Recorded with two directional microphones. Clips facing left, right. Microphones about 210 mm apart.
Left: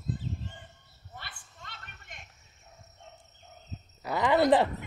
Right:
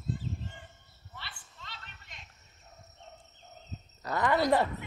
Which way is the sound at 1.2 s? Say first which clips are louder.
Left 1 dB; 50° left (ahead or behind).